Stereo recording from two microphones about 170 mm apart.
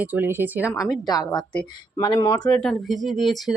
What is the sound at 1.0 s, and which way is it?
Speech, 25° left (ahead or behind).